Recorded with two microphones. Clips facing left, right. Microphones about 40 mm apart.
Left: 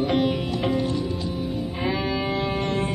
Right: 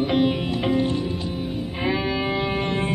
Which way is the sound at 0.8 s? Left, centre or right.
Right.